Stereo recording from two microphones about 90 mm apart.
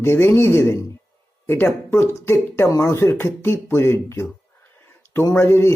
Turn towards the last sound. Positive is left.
turn(degrees=25)  # may be behind; listen again after turning